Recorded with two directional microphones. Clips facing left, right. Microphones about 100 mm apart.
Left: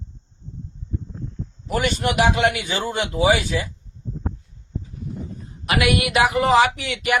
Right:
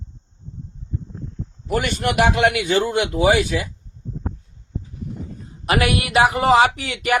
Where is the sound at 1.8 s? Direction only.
55° right (ahead or behind).